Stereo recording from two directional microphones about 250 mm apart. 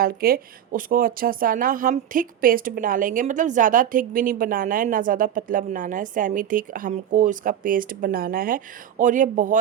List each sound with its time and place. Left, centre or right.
0.0 s speech: right